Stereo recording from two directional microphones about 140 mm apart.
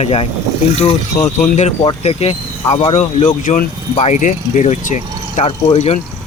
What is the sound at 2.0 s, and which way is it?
Speech, 45° left (ahead or behind).